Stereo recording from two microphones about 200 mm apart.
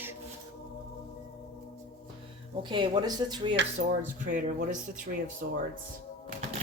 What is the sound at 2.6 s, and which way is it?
Speech, 25° right (ahead or behind).